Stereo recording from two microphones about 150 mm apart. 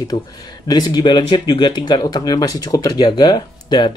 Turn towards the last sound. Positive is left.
turn(degrees=30)  # may be behind; listen again after turning